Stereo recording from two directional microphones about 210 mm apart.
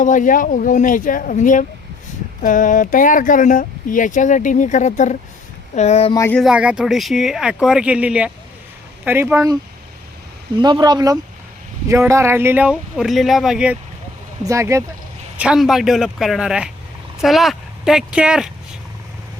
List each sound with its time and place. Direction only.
0.0 s speech: 40° left (ahead or behind)
6.1 s speech: 10° left (ahead or behind)
6.4 s speech: 5° right (ahead or behind)
10.6 s speech: 20° right (ahead or behind)
15.4 s speech: 5° right (ahead or behind)